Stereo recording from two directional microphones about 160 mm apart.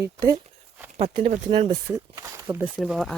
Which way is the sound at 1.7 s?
20° right (ahead or behind).